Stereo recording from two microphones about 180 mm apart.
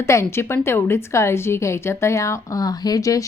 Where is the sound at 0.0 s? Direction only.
15° left (ahead or behind).